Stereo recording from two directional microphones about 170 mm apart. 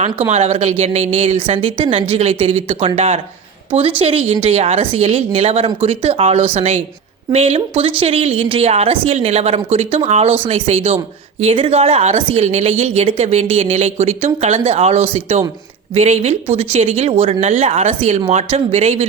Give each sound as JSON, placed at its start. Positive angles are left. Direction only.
{"t": 0.3, "sound": "a woman's voice", "side_deg": -40}